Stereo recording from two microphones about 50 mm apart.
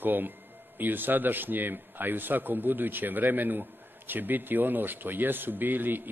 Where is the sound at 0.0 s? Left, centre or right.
Right.